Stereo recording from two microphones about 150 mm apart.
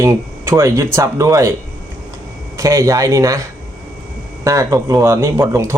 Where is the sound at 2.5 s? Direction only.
20° right (ahead or behind).